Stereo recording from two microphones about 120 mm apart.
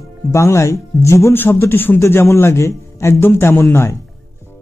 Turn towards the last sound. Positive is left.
turn(degrees=20)  # may be behind; listen again after turning